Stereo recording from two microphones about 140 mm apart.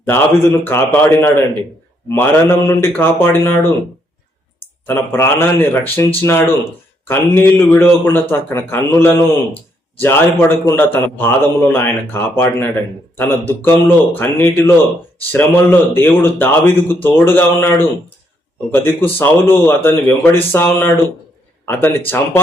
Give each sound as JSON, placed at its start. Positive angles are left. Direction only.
{"t": 0.6, "sound": "a man's voice", "side_deg": 15}
{"t": 4.9, "sound": "a man's voice", "side_deg": 15}